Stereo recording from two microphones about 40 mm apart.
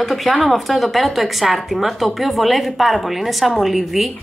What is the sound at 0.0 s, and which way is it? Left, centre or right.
A woman's voice, centre.